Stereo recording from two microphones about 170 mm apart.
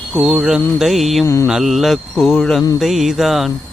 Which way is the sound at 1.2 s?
15° left (ahead or behind).